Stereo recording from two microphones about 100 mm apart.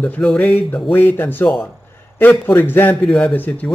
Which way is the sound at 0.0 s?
5° left (ahead or behind).